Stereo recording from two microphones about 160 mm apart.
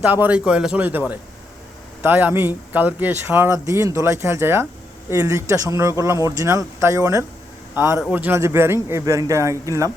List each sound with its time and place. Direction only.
0.0 s speech: 10° right (ahead or behind)